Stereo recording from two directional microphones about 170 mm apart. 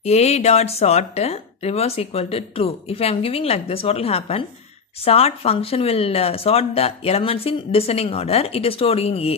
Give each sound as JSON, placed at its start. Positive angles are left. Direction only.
{"t": 0.0, "sound": "speech", "side_deg": 40}